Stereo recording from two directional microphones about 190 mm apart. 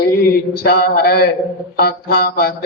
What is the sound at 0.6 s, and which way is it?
A man's voice, 55° left (ahead or behind).